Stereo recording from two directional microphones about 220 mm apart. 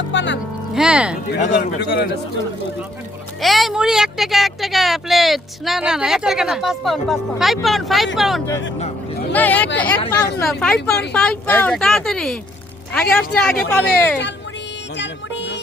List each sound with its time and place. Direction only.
0.1 s speech: 55° left (ahead or behind)
0.7 s speech: 5° right (ahead or behind)
1.5 s a man's voice: 50° left (ahead or behind)
3.4 s a woman's voice: centre (ahead or behind)
14.9 s music: 55° left (ahead or behind)